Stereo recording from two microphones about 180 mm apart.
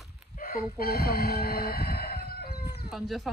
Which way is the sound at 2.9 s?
Centre (ahead or behind).